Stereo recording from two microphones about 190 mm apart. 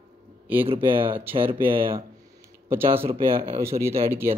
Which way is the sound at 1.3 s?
30° right (ahead or behind).